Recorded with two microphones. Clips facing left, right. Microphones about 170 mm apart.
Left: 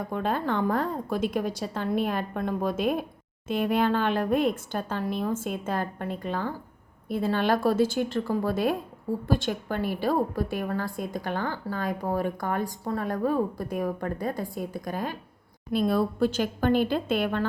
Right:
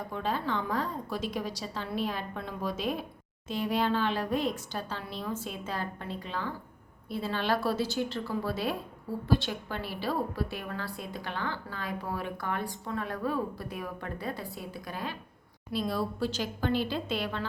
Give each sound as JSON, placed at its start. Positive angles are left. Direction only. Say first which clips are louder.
{"t": 0.1, "sound": "a woman's voice", "louder": "left 4 dB", "side_deg": 50}